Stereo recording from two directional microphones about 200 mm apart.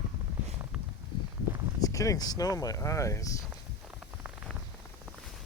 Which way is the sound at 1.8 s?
15° left (ahead or behind).